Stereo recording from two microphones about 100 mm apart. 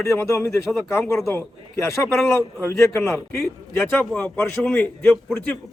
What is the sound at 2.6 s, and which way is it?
Speech, 25° left (ahead or behind).